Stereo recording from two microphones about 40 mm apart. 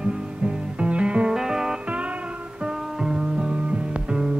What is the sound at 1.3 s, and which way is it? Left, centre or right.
Music, centre.